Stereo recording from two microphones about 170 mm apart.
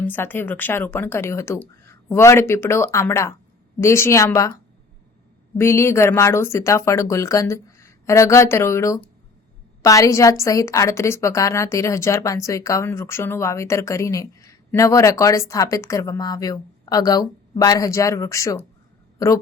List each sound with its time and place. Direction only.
0.0 s a woman's voice: 10° left (ahead or behind)